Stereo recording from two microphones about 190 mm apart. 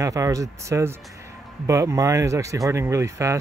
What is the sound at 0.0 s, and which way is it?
Speech, 15° right (ahead or behind).